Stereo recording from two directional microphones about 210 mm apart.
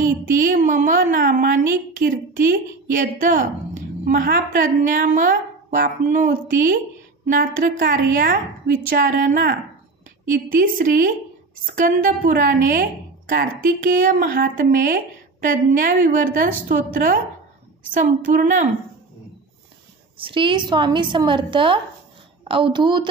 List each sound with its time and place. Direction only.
0.0 s a woman's voice: 40° right (ahead or behind)
7.8 s a woman's voice: 40° right (ahead or behind)
20.2 s a woman's voice: 25° right (ahead or behind)